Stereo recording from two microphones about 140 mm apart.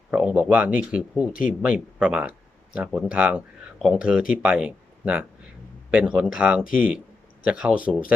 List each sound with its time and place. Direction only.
0.1 s speech: 10° right (ahead or behind)